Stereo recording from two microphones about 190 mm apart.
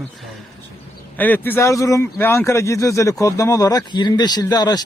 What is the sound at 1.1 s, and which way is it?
Speech, 10° left (ahead or behind).